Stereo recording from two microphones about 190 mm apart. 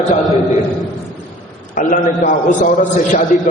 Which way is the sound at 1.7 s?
45° left (ahead or behind).